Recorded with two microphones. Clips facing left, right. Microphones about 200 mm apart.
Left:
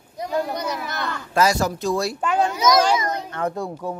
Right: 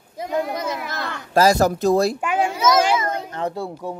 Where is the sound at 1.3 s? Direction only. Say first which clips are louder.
Right 4 dB; 35° right (ahead or behind).